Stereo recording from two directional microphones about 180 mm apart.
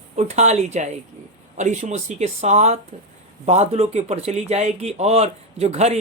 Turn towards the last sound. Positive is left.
turn(degrees=-35)  # may be behind; listen again after turning